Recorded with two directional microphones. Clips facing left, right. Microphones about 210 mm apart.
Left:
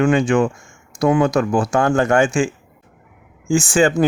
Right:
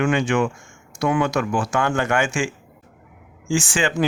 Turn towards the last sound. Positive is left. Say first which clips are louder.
# left 7 dB
turn(degrees=45)  # may be behind; listen again after turning